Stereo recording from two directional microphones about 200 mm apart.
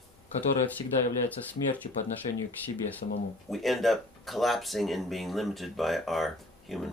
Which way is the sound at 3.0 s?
40° left (ahead or behind).